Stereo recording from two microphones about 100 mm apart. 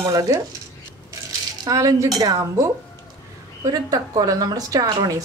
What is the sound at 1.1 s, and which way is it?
Rattle, 35° right (ahead or behind).